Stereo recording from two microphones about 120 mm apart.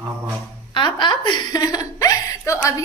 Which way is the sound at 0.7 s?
40° left (ahead or behind).